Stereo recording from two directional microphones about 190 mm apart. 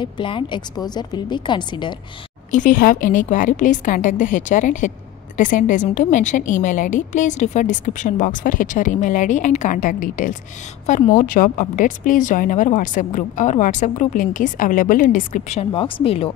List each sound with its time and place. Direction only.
0.0 s a woman's voice: 25° left (ahead or behind)
2.5 s a woman's voice: 45° left (ahead or behind); by 16.3 s 30° left (ahead or behind)